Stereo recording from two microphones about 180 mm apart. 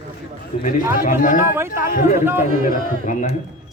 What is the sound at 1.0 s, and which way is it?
Speech, 45° left (ahead or behind).